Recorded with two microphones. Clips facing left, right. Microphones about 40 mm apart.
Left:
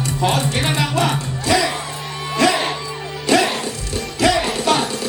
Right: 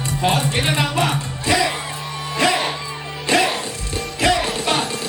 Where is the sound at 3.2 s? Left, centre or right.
Right.